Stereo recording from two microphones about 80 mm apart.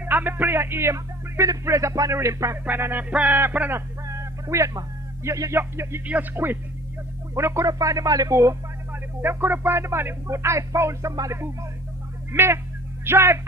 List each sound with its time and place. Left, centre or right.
0.0 s speech: right
2.6 s music: right
4.1 s a sound: right
5.2 s speech: right
6.3 s music: right
7.3 s speech: right
9.2 s speech: right
12.3 s speech: right